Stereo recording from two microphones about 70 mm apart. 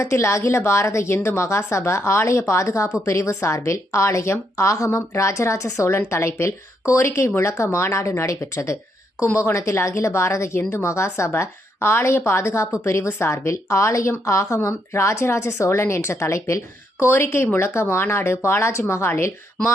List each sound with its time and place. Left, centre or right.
0.0 s a woman's voice: left